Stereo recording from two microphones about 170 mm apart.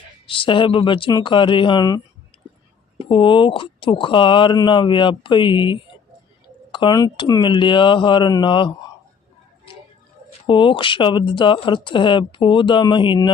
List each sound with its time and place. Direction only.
0.3 s speech: 30° left (ahead or behind)
3.0 s speech: 30° left (ahead or behind)
10.4 s speech: 30° left (ahead or behind)